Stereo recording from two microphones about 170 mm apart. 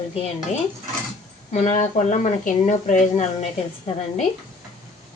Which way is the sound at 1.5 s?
45° left (ahead or behind).